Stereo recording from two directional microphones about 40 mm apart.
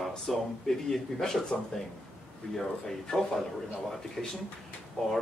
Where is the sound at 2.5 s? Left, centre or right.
Centre.